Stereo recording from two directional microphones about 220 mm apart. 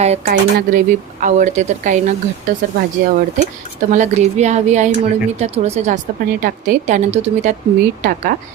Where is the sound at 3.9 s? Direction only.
30° right (ahead or behind).